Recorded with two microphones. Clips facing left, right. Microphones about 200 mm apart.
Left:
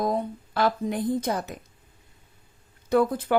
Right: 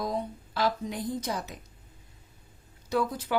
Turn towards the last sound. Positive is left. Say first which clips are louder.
# left 6 dB
turn(degrees=55)  # may be behind; listen again after turning